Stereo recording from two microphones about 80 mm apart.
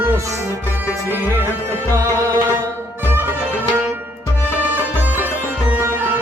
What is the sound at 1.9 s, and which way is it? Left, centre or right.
Music, right.